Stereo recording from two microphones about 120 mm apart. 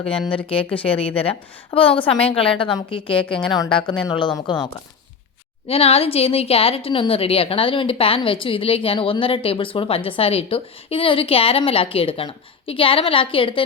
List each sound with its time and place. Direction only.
0.2 s speech: 10° left (ahead or behind)
0.4 s a woman's voice: 50° left (ahead or behind)
5.6 s a woman's voice: 55° left (ahead or behind)